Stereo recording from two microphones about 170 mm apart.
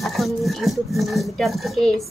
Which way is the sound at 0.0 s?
Centre (ahead or behind).